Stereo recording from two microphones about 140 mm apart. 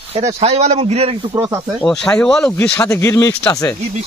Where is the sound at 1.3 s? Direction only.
20° right (ahead or behind).